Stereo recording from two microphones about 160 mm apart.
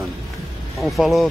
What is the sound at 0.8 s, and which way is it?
Speech, centre (ahead or behind).